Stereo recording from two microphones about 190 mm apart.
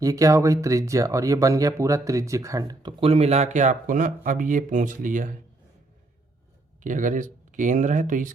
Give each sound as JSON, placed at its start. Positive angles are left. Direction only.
{"t": 0.0, "sound": "speech", "side_deg": -20}
{"t": 6.8, "sound": "speech", "side_deg": -45}